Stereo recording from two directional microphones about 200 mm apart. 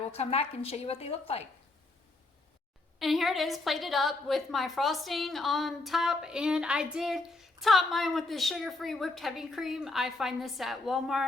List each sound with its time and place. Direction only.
0.1 s a woman's voice: 30° left (ahead or behind)
3.0 s a woman's voice: centre (ahead or behind)